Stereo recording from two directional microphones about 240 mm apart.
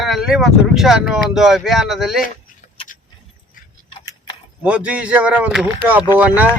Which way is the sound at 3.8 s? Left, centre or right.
Centre.